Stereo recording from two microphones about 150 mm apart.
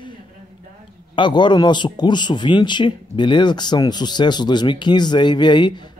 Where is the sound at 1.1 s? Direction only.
30° left (ahead or behind).